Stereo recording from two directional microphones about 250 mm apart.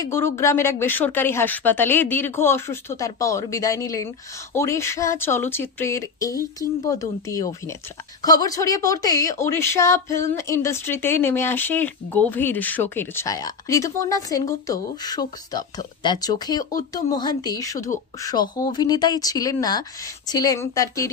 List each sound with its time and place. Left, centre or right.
0.0 s speech: centre